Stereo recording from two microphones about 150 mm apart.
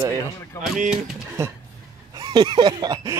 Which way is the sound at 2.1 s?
30° right (ahead or behind).